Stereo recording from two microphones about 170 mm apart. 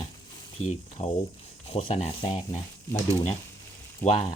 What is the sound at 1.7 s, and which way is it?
Rub, 40° left (ahead or behind).